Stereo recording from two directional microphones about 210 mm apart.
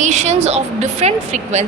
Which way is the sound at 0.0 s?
35° right (ahead or behind).